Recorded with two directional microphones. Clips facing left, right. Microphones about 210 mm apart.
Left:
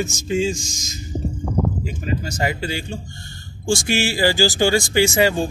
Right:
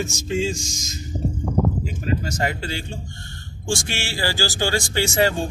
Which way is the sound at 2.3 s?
5° left (ahead or behind).